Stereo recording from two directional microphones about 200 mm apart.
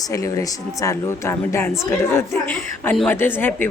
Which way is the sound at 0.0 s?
15° left (ahead or behind).